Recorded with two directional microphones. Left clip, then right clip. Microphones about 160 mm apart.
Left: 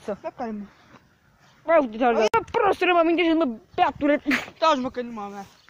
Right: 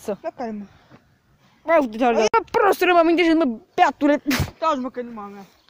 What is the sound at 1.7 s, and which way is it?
Speech, 35° right (ahead or behind).